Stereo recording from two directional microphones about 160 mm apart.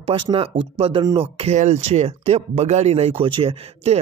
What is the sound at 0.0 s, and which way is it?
Speech, 35° right (ahead or behind).